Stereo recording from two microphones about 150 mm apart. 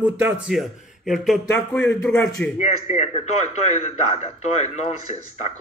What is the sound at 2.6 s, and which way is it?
A man's voice, 50° left (ahead or behind).